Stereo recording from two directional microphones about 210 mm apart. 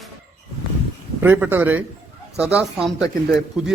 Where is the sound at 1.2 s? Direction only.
10° right (ahead or behind).